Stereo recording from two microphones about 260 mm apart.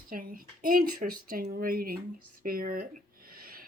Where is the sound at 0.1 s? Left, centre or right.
Right.